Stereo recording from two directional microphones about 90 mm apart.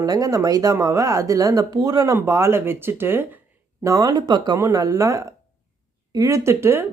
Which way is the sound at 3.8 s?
40° right (ahead or behind).